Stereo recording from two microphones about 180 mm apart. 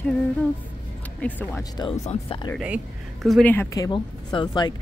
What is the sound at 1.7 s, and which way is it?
Speech, 20° left (ahead or behind).